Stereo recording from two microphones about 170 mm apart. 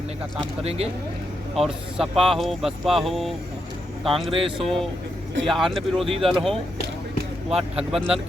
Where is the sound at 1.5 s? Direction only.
Centre (ahead or behind).